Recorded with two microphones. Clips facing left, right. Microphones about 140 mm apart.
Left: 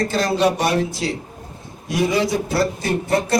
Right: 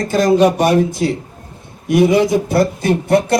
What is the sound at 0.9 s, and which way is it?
Speech, 55° right (ahead or behind).